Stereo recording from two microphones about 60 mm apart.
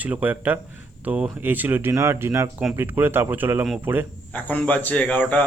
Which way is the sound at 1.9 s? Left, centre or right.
Right.